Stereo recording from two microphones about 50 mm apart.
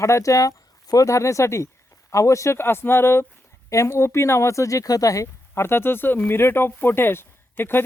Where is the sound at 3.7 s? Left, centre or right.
Left.